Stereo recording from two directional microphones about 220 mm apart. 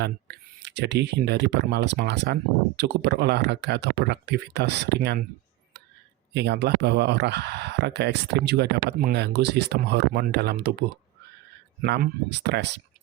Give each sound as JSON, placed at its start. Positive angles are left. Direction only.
{"t": 0.0, "sound": "speech", "side_deg": -50}
{"t": 6.3, "sound": "speech", "side_deg": -50}
{"t": 11.8, "sound": "speech", "side_deg": -45}